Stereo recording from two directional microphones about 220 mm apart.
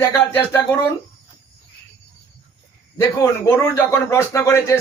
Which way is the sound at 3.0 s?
10° left (ahead or behind).